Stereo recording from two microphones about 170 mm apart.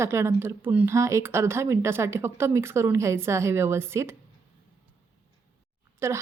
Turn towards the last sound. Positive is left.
turn(degrees=-15)  # may be behind; listen again after turning